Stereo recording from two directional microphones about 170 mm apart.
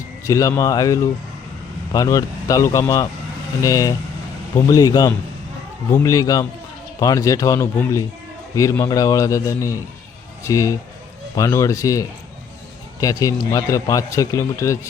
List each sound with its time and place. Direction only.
0.3 s speech: 20° left (ahead or behind)